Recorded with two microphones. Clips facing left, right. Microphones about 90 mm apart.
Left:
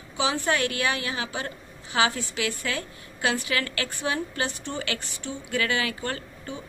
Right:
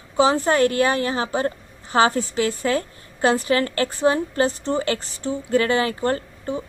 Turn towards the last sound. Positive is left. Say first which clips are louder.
# right 9 dB
turn(degrees=-35)  # may be behind; listen again after turning